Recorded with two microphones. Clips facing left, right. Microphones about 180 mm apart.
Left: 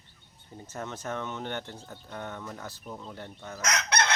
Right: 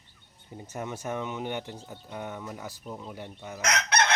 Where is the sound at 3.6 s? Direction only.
55° right (ahead or behind).